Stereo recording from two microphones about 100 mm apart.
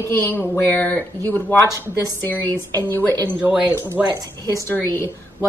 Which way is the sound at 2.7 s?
20° left (ahead or behind).